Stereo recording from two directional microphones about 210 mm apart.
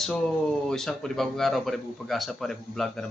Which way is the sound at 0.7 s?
5° left (ahead or behind).